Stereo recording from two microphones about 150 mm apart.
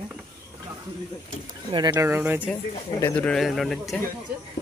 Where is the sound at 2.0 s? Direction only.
15° right (ahead or behind).